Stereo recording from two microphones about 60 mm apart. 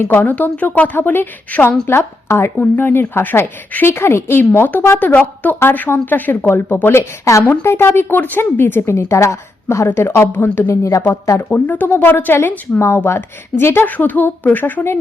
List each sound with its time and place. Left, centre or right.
0.0 s a woman's voice: left
1.9 s a woman's voice: left
2.6 s a woman's voice: left
6.4 s a woman's voice: left
6.9 s speech: left
7.6 s a woman's voice: left
9.0 s a woman's voice: left
9.9 s a woman's voice: left
10.4 s speech: left
10.7 s speech: left
11.4 s a woman's voice: left
13.9 s a woman's voice: left